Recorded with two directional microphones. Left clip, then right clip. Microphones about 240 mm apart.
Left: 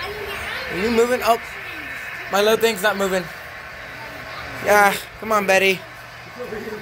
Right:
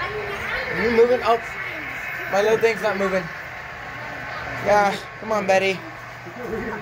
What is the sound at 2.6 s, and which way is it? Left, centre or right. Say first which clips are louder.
Speech: left 1 dB; left.